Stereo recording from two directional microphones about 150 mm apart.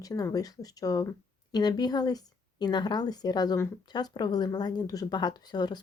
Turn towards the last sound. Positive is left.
turn(degrees=30)  # may be behind; listen again after turning